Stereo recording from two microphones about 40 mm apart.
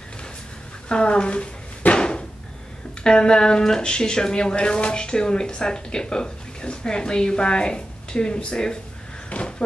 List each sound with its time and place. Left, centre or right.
0.8 s speech: left
2.0 s a sound: left
3.0 s speech: left